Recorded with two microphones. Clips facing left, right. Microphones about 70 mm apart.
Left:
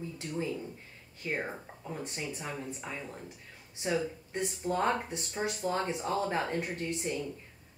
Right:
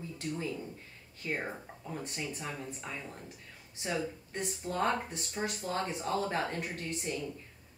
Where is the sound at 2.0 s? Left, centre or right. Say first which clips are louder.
Left 1 dB; centre.